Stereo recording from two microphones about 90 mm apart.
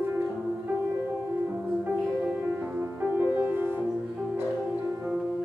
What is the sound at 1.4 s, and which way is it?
Music, 20° right (ahead or behind).